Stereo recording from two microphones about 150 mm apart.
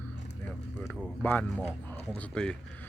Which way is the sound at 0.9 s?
5° left (ahead or behind).